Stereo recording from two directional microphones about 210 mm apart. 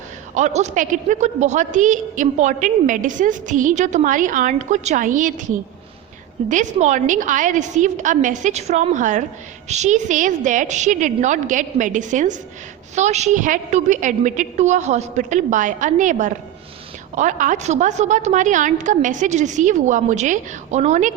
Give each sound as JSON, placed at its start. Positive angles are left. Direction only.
{"t": 0.3, "sound": "a woman's voice", "side_deg": -35}
{"t": 6.5, "sound": "a woman's voice", "side_deg": -35}